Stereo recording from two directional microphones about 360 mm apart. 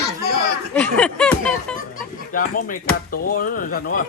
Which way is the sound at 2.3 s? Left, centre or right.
Left.